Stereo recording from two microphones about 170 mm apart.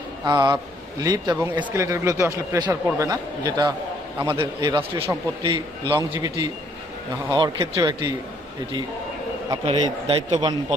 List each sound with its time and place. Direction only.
0.3 s a man's voice: 25° right (ahead or behind)
9.6 s a man's voice: 35° right (ahead or behind)